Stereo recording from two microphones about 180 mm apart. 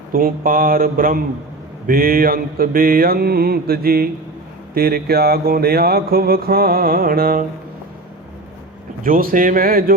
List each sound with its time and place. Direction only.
0.1 s speech: 50° right (ahead or behind)
1.9 s mantra: 55° right (ahead or behind)
9.0 s speech: 50° right (ahead or behind)